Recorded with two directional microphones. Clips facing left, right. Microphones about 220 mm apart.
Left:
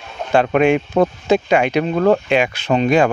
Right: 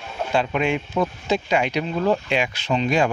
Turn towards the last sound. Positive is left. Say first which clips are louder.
# left 6 dB
turn(degrees=55)  # may be behind; listen again after turning